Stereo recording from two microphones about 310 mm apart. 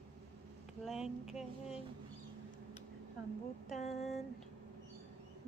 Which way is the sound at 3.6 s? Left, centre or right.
Left.